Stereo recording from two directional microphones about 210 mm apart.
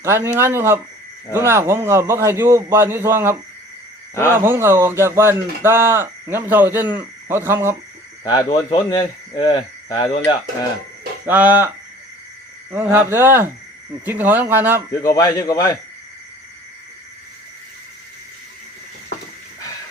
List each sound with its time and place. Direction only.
0.0 s speech: 10° right (ahead or behind)
4.1 s a man's voice: 15° left (ahead or behind)
4.4 s speech: 10° right (ahead or behind)
8.2 s a man's voice: 20° left (ahead or behind)
8.9 s cricket: 20° left (ahead or behind)
11.3 s speech: 10° right (ahead or behind)
12.7 s speech: 10° right (ahead or behind)
15.0 s a man's voice: 15° left (ahead or behind)